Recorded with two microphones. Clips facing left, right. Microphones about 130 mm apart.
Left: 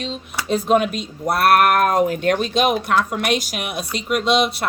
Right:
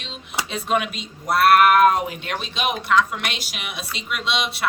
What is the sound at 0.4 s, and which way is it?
Speech, 40° left (ahead or behind).